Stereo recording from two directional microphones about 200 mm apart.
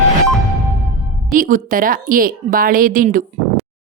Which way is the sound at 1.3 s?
40° right (ahead or behind).